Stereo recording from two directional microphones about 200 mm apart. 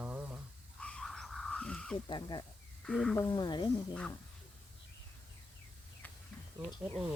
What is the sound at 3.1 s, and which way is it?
Speech, 15° left (ahead or behind).